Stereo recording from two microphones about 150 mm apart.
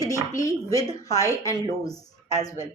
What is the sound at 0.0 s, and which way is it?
Speech, 20° left (ahead or behind).